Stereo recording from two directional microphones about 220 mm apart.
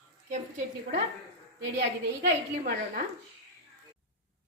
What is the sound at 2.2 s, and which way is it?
Speech, 40° right (ahead or behind).